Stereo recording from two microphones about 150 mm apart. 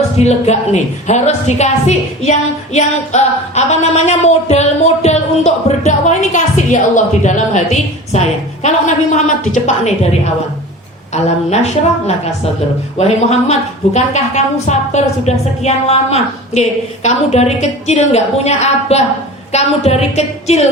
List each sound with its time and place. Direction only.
0.2 s a woman's voice: 45° left (ahead or behind)
11.6 s a woman's voice: 45° left (ahead or behind)